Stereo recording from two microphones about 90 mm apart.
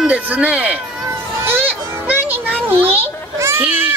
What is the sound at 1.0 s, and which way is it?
Children playing, 25° right (ahead or behind).